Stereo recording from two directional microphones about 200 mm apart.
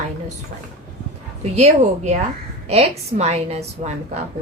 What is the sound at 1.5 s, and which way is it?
Speech, 35° right (ahead or behind).